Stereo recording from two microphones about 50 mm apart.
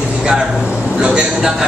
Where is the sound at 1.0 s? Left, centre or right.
Centre.